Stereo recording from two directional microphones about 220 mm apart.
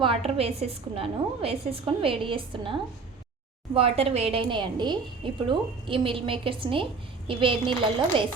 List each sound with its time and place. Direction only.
0.3 s a woman's voice: 25° right (ahead or behind)
3.8 s a woman's voice: 25° right (ahead or behind)